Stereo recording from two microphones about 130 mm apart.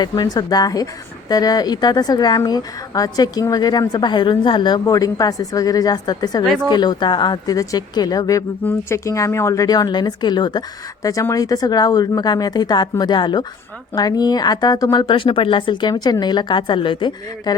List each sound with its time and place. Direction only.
0.0 s speech: 30° left (ahead or behind)